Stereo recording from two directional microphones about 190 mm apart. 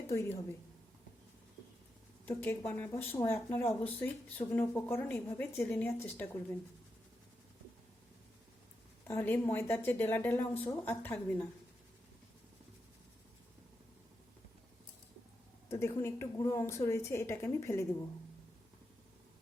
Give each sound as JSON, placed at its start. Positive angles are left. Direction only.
{"t": 0.1, "sound": "speech", "side_deg": 10}
{"t": 2.2, "sound": "speech", "side_deg": 10}
{"t": 9.0, "sound": "speech", "side_deg": 10}
{"t": 15.7, "sound": "speech", "side_deg": 15}